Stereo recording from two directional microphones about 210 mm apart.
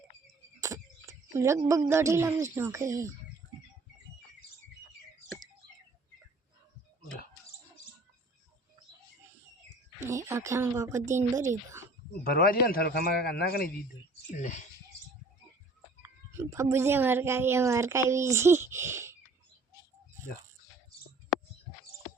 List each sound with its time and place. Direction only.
0.6 s speech: 15° right (ahead or behind)
10.0 s speech: 15° right (ahead or behind)
12.2 s a man's voice: 45° left (ahead or behind)
14.3 s speech: 35° left (ahead or behind)
16.0 s a child's voice: 15° right (ahead or behind)